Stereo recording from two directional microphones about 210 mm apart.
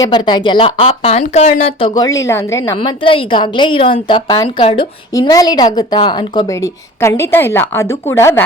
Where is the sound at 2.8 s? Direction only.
25° left (ahead or behind).